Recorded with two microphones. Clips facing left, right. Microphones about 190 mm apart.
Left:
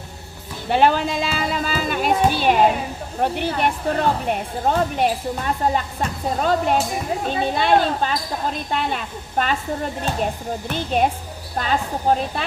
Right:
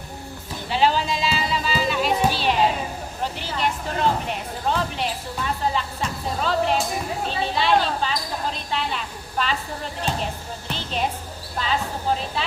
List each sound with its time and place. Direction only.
0.7 s music: 55° left (ahead or behind)
3.2 s speech: 55° left (ahead or behind)